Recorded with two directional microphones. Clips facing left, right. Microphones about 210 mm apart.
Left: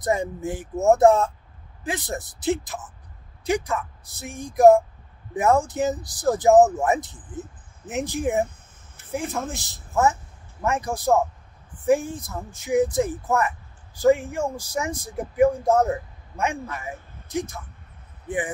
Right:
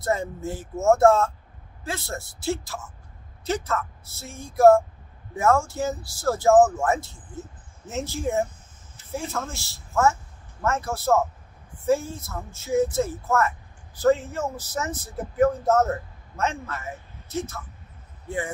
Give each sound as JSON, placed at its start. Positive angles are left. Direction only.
{"t": 0.0, "sound": "speech", "side_deg": 15}